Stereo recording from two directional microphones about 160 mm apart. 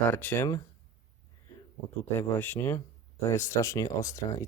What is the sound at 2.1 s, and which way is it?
Speech, 15° left (ahead or behind).